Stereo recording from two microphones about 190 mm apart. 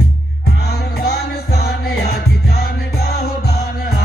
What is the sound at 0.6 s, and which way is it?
Music, 55° left (ahead or behind).